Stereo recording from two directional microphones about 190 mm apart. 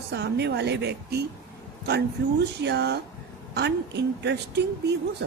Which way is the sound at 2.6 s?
65° right (ahead or behind).